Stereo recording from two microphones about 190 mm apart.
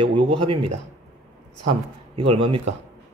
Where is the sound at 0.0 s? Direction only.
30° right (ahead or behind).